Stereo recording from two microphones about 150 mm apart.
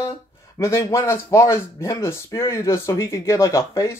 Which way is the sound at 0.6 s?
20° left (ahead or behind).